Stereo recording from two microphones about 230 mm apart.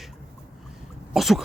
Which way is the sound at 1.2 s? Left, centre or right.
Centre.